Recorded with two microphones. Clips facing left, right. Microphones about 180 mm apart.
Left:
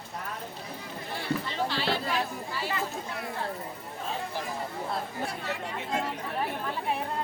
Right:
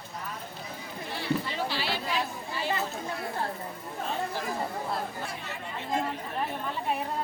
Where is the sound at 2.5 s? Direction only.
20° right (ahead or behind).